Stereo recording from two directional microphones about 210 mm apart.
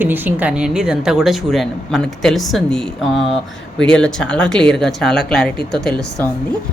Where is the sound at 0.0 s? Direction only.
10° right (ahead or behind).